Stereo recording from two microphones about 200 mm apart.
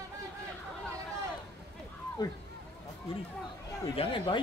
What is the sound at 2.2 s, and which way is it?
Speech, 20° left (ahead or behind).